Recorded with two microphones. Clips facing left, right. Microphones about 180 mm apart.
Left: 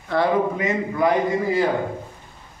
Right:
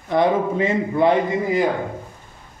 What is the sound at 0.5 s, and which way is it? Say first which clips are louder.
A man's voice: right 4 dB; 30° right (ahead or behind).